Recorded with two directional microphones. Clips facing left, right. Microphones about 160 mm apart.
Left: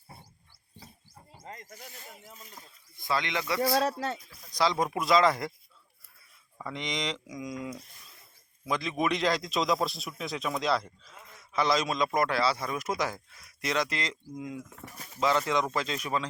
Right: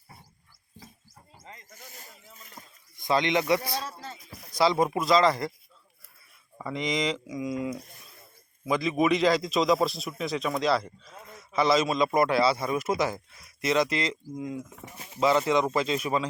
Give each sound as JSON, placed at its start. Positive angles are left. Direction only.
{"t": 1.5, "sound": "a sound", "side_deg": 45}
{"t": 3.0, "sound": "speech", "side_deg": -20}
{"t": 3.8, "sound": "speech", "side_deg": 70}
{"t": 4.3, "sound": "a sound", "side_deg": -65}
{"t": 4.5, "sound": "a man's voice", "side_deg": -5}
{"t": 6.6, "sound": "a man's voice", "side_deg": -5}
{"t": 8.6, "sound": "a man's voice", "side_deg": -5}
{"t": 14.8, "sound": "speech", "side_deg": -25}
{"t": 15.1, "sound": "a man's voice", "side_deg": -5}